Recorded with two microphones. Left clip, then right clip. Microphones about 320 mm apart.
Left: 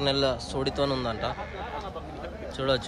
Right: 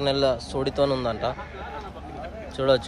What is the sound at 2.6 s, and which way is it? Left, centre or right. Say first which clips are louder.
Speech: right 6 dB; centre.